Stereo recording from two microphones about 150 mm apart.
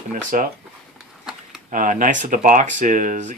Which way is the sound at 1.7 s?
60° right (ahead or behind).